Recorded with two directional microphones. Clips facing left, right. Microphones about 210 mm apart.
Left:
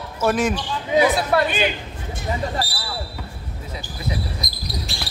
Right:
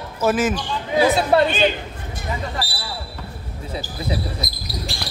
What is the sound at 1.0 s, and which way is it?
Speech, 25° right (ahead or behind).